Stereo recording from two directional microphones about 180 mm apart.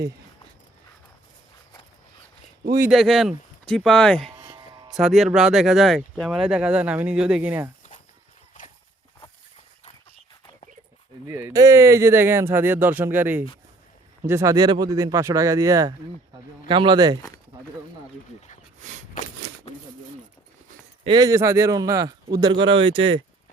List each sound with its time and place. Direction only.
2.9 s speech: centre (ahead or behind)
4.4 s a sound: 25° right (ahead or behind)
4.9 s speech: centre (ahead or behind)
11.3 s speech: 15° right (ahead or behind)
21.0 s speech: 25° right (ahead or behind)